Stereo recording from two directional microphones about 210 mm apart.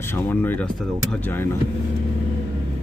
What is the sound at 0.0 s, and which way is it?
Speech, 10° left (ahead or behind).